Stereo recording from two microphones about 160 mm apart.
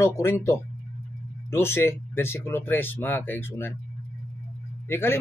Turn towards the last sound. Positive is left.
turn(degrees=15)  # may be behind; listen again after turning